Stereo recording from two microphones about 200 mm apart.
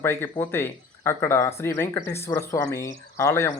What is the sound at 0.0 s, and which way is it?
Speech, 10° left (ahead or behind).